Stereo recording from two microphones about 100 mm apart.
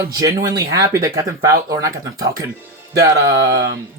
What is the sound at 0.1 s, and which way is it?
Speech, 35° right (ahead or behind).